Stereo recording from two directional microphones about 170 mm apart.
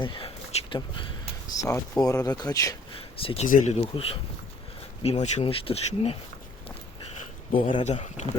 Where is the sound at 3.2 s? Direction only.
35° left (ahead or behind).